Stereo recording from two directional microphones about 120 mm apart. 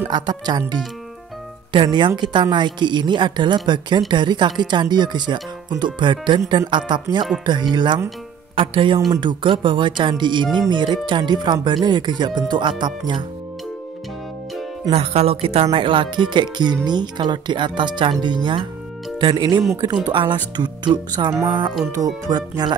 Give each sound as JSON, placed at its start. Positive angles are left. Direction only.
{"t": 0.1, "sound": "speech", "side_deg": -35}
{"t": 14.9, "sound": "speech", "side_deg": -60}